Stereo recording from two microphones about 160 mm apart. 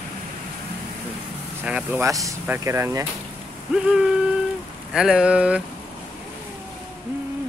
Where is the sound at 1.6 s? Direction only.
10° right (ahead or behind).